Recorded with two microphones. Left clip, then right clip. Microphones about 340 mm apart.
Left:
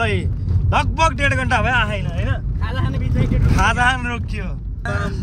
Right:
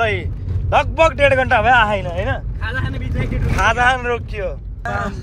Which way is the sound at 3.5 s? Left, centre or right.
Centre.